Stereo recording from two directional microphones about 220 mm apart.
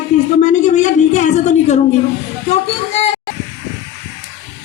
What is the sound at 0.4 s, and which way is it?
A woman's voice, 35° left (ahead or behind).